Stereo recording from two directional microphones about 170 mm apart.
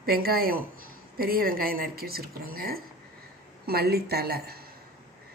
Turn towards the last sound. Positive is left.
turn(degrees=-65)  # may be behind; listen again after turning